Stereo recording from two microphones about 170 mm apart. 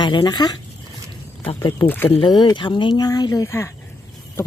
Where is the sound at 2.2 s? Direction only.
25° left (ahead or behind).